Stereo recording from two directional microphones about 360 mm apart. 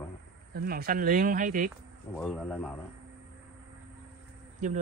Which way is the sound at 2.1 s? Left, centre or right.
Centre.